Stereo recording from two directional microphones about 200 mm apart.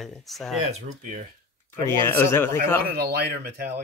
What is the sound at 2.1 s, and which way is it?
Speech, 10° left (ahead or behind).